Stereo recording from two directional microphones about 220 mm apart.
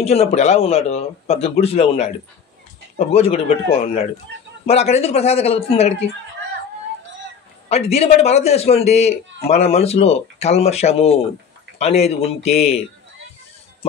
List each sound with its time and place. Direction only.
0.0 s speech: 30° left (ahead or behind)
7.6 s speech: 30° left (ahead or behind)